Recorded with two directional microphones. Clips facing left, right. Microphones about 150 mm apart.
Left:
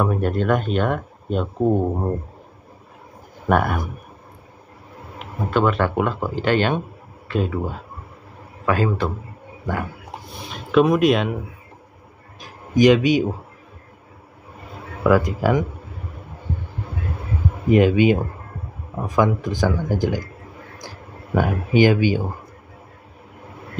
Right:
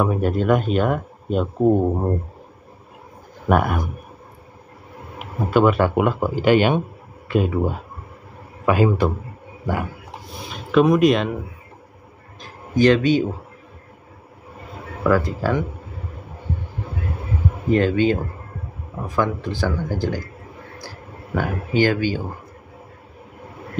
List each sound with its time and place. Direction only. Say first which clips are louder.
0.0 s speech: right 1 dB; centre (ahead or behind)
3.4 s speech: even; centre (ahead or behind)
5.5 s speech: right 3 dB; 10° right (ahead or behind)
8.6 s speech: right 3 dB; 15° right (ahead or behind)
10.5 s speech: right 1 dB; centre (ahead or behind)
12.4 s a sound: left 2 dB; 10° left (ahead or behind)
15.0 s speech: left 2 dB; 15° left (ahead or behind)
17.6 s speech: left 3 dB; 15° left (ahead or behind)
21.4 s speech: left 3 dB; 15° left (ahead or behind)